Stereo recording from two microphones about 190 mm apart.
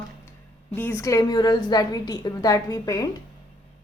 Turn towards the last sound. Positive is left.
turn(degrees=20)  # may be behind; listen again after turning